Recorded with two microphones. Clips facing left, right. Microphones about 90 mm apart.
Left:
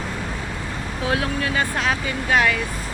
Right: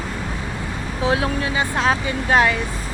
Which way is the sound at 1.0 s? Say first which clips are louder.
Right 3 dB; 25° right (ahead or behind).